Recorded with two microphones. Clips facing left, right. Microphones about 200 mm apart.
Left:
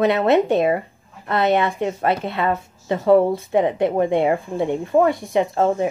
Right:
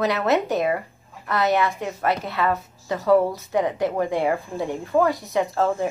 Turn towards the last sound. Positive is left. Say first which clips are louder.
# left 3 dB
turn(degrees=20)  # may be behind; listen again after turning